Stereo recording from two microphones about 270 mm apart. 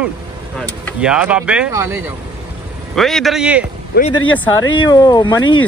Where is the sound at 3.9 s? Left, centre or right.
Left.